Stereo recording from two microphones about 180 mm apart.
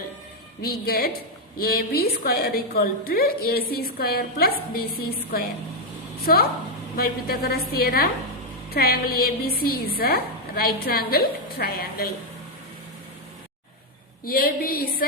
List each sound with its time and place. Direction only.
0.6 s a woman's voice: 60° left (ahead or behind)
6.3 s a woman's voice: 55° left (ahead or behind)
14.3 s a woman's voice: 55° left (ahead or behind)